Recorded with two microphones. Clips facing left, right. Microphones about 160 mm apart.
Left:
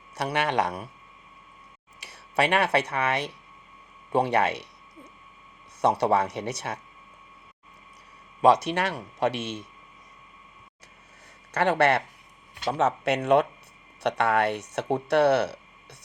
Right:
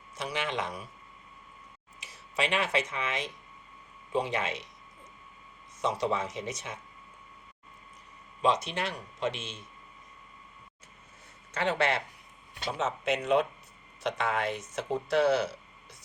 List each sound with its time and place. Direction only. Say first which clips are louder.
0.1 s speech: left 7 dB; 65° left (ahead or behind)
2.0 s speech: left 7 dB; 65° left (ahead or behind)
5.8 s speech: left 7 dB; 65° left (ahead or behind)
8.4 s speech: left 8 dB; 70° left (ahead or behind)
11.5 s speech: left 6 dB; 65° left (ahead or behind)